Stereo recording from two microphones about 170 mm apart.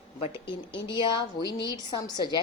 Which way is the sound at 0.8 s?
25° left (ahead or behind).